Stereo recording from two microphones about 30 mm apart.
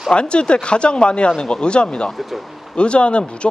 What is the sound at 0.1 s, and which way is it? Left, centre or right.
Speech, left.